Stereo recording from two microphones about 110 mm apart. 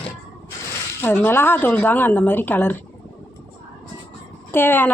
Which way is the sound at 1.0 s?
20° left (ahead or behind).